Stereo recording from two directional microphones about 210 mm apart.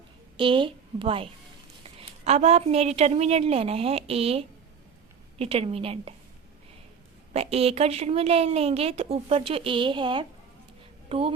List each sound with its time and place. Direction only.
0.3 s a woman's voice: 25° right (ahead or behind)
7.3 s a woman's voice: 30° right (ahead or behind)